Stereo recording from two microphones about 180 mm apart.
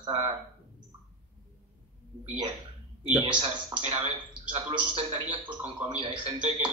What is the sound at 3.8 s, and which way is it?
Speech, 35° right (ahead or behind).